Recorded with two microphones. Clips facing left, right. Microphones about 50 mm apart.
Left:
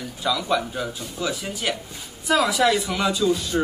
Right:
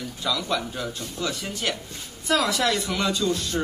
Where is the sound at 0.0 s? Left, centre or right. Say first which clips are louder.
Left 3 dB; centre.